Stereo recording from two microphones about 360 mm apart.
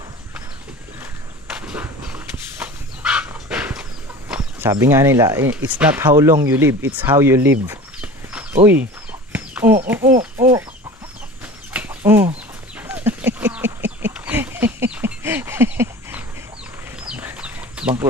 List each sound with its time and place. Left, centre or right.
1.5 s dog: centre
4.3 s speech: centre
9.3 s chicken: centre
9.8 s speech: centre
10.1 s bird: right
11.7 s a sound: centre
17.1 s chicken: centre